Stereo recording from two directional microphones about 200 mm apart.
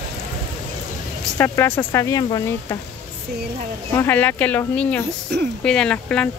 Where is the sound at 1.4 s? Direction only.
10° left (ahead or behind).